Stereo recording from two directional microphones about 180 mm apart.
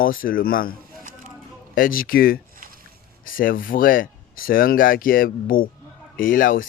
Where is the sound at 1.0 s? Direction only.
50° right (ahead or behind).